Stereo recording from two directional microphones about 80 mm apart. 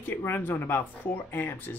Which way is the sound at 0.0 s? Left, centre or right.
Left.